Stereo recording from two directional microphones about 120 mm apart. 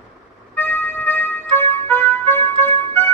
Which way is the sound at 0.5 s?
15° left (ahead or behind).